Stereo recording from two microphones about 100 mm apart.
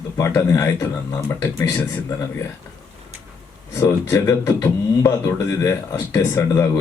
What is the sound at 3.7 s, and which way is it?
Speech, 30° left (ahead or behind).